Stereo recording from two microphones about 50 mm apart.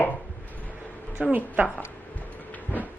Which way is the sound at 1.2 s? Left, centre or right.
Right.